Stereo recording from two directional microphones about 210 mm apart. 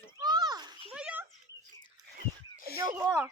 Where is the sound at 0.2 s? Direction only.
20° right (ahead or behind).